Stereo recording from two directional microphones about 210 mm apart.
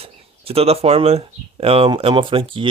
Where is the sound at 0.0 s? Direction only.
30° right (ahead or behind).